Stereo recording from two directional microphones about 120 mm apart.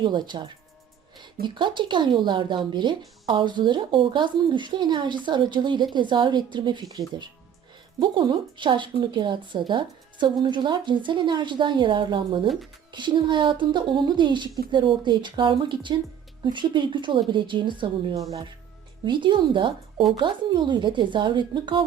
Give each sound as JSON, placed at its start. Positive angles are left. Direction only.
{"t": 0.0, "sound": "a woman's voice", "side_deg": -40}
{"t": 18.2, "sound": "speech", "side_deg": -30}
{"t": 19.0, "sound": "a woman's voice", "side_deg": -40}